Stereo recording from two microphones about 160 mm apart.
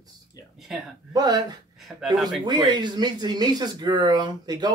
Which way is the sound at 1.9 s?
Centre (ahead or behind).